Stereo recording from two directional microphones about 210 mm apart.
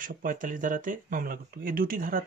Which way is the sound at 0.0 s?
40° right (ahead or behind).